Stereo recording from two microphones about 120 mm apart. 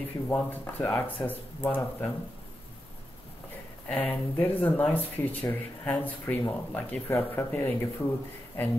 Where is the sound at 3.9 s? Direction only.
15° left (ahead or behind).